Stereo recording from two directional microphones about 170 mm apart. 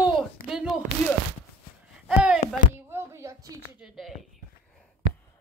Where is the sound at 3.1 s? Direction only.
15° right (ahead or behind).